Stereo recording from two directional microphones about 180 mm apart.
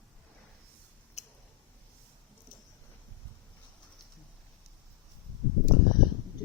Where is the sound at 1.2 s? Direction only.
40° left (ahead or behind).